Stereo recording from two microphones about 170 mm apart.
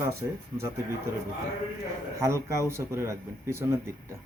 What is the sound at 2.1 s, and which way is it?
Speech, 15° right (ahead or behind).